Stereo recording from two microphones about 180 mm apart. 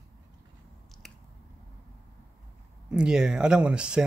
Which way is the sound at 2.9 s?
5° right (ahead or behind).